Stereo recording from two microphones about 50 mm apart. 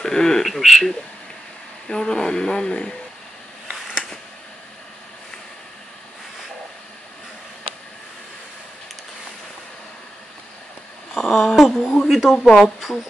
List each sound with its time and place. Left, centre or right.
0.0 s speech: centre
0.5 s speech: centre
1.9 s speech: centre
11.1 s a sound: centre
12.1 s speech: centre